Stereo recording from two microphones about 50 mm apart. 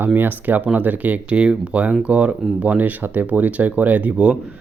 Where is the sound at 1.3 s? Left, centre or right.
Centre.